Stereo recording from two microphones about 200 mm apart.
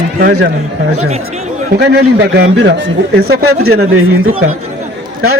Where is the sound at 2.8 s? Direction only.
90° right.